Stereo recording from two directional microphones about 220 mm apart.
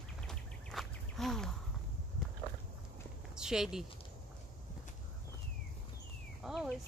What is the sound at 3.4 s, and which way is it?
Speech, 5° right (ahead or behind).